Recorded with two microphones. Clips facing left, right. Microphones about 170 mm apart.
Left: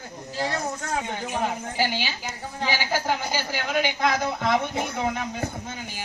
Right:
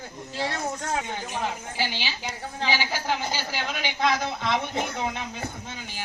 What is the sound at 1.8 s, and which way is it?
Speech, 45° left (ahead or behind).